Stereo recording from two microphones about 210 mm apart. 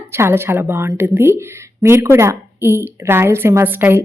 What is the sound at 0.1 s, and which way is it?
Speech, 10° right (ahead or behind).